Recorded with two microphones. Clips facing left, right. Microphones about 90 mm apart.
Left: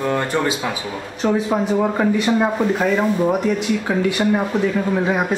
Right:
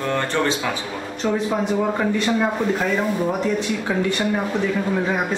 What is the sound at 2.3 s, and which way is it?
Speech, 15° left (ahead or behind).